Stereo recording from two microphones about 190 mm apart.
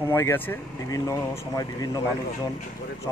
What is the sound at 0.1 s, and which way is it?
Speech, 10° left (ahead or behind).